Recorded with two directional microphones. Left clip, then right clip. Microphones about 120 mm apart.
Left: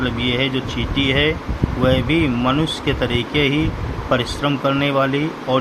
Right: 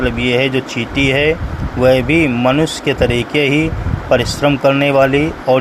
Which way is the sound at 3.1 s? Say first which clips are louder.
Right 4 dB; 35° left (ahead or behind).